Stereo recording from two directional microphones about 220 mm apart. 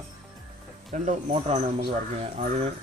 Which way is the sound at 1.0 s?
30° right (ahead or behind).